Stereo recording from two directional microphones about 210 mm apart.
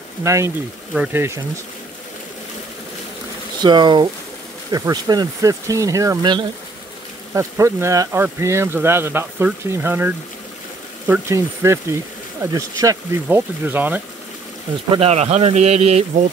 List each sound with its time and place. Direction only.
0.2 s speech: 15° right (ahead or behind)
3.6 s speech: 20° right (ahead or behind)
14.9 s speech: 30° right (ahead or behind)